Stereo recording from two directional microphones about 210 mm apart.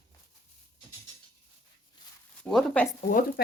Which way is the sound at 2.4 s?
5° left (ahead or behind).